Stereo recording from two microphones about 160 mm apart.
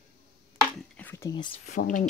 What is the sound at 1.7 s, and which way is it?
Speech, 55° left (ahead or behind).